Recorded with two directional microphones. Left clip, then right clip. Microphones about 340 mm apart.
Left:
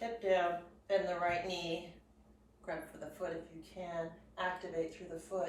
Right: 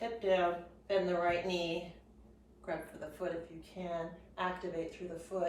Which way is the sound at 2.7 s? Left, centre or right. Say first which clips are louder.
Right 2 dB; centre.